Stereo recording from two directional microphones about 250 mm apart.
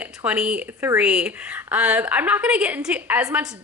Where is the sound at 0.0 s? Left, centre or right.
Centre.